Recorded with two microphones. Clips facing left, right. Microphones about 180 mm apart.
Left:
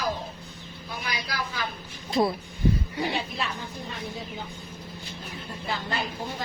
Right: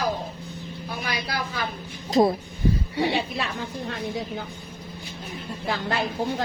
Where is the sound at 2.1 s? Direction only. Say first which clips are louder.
Right 5 dB; 45° right (ahead or behind).